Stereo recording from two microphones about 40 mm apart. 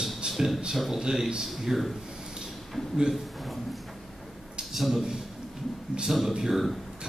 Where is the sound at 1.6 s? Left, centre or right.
Centre.